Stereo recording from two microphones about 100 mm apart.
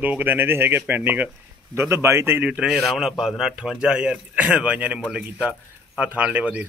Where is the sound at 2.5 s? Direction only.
10° right (ahead or behind).